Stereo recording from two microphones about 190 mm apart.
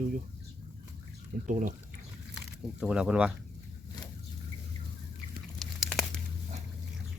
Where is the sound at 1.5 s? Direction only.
45° right (ahead or behind).